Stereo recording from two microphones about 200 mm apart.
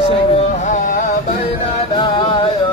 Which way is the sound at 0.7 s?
40° left (ahead or behind).